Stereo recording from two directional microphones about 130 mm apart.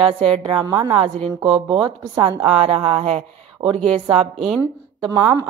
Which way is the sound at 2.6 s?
50° right (ahead or behind).